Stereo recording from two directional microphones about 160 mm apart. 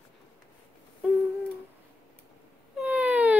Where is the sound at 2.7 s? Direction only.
10° right (ahead or behind).